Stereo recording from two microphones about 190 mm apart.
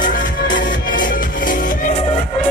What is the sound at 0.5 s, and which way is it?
Music, 45° left (ahead or behind).